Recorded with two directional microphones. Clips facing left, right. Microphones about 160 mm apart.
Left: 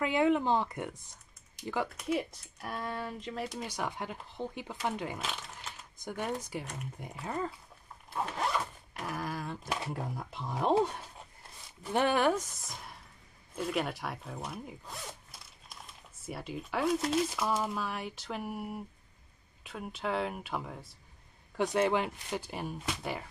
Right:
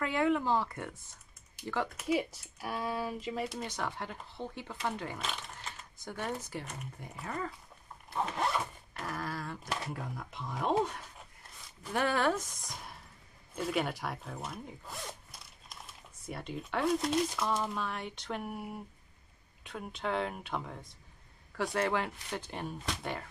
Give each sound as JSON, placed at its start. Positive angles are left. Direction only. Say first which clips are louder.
{"t": 0.0, "sound": "speech", "louder": "left 2 dB", "side_deg": 20}
{"t": 1.9, "sound": "speech", "louder": "right 1 dB", "side_deg": 0}
{"t": 3.6, "sound": "speech", "louder": "left 1 dB", "side_deg": 15}
{"t": 5.2, "sound": "a sound", "louder": "even", "side_deg": 0}
{"t": 6.0, "sound": "speech", "louder": "left 2 dB", "side_deg": 15}
{"t": 6.6, "sound": "speech", "louder": "left 2 dB", "side_deg": -5}
{"t": 7.2, "sound": "speech", "louder": "left 3 dB", "side_deg": 20}
{"t": 8.1, "sound": "zipper", "louder": "even", "side_deg": 0}
{"t": 9.1, "sound": "speech", "louder": "left 2 dB", "side_deg": 15}
{"t": 10.1, "sound": "speech", "louder": "left 2 dB", "side_deg": 30}
{"t": 11.9, "sound": "speech", "louder": "left 3 dB", "side_deg": 20}
{"t": 12.6, "sound": "speech", "louder": "even", "side_deg": 0}
{"t": 21.5, "sound": "speech", "louder": "left 3 dB", "side_deg": 20}